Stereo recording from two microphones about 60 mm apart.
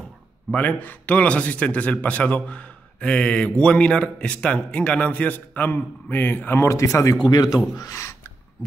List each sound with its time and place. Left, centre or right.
0.5 s speech: left
6.7 s speech: left
7.2 s a man's voice: left